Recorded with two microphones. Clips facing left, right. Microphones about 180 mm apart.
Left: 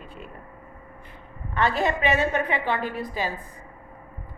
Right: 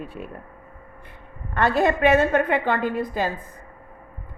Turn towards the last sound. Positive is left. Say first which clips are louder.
# right 5 dB
turn(degrees=-50)  # may be behind; listen again after turning